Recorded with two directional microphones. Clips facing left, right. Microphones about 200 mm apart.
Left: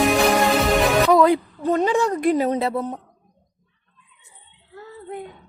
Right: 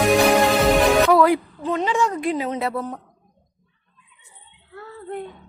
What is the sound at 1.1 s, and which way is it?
Music, 25° left (ahead or behind).